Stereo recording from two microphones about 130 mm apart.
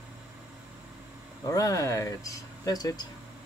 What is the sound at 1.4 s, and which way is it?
Speech, 25° left (ahead or behind).